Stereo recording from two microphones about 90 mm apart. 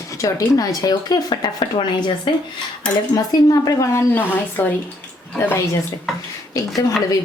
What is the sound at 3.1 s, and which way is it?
Speech, 45° left (ahead or behind).